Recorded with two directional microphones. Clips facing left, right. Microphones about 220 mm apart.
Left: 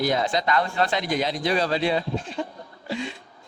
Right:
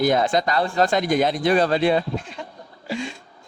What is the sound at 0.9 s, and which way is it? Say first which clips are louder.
Speech: right 5 dB; 50° right (ahead or behind).